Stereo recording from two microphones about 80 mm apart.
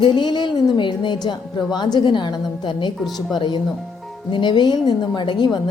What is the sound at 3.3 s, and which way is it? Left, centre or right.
Speech, left.